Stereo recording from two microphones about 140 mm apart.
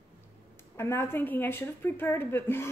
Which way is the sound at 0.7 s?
20° left (ahead or behind).